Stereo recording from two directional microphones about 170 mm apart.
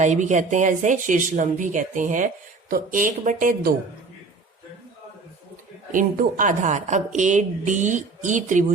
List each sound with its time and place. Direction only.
0.0 s speech: 45° right (ahead or behind)
5.9 s speech: 50° right (ahead or behind)